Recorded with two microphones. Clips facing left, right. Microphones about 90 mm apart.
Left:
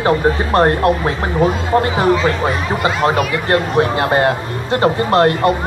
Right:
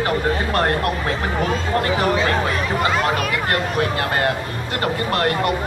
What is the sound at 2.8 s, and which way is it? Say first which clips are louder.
Speech: left 6 dB; 30° left (ahead or behind).